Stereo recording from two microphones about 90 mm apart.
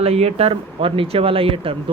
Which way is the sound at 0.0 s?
90° right.